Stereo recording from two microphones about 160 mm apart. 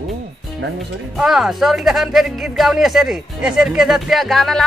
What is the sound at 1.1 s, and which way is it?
Speech, centre (ahead or behind).